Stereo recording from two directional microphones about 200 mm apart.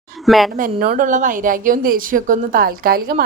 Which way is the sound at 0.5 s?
45° right (ahead or behind).